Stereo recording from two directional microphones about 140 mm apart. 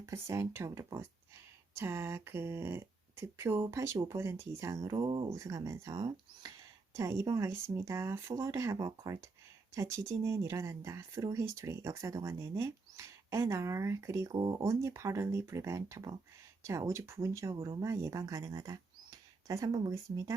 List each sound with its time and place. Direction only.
0.0 s speech: 20° right (ahead or behind)
5.3 s speech: 20° right (ahead or behind)